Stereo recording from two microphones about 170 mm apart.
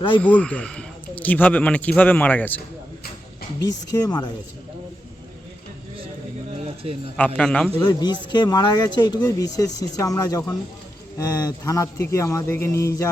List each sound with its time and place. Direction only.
0.2 s speech: 10° left (ahead or behind)
3.9 s speech: 25° left (ahead or behind)
7.3 s a man's voice: 5° left (ahead or behind)
7.8 s speech: 25° left (ahead or behind)